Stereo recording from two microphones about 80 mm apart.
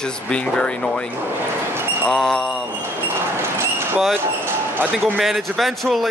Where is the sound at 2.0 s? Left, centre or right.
Centre.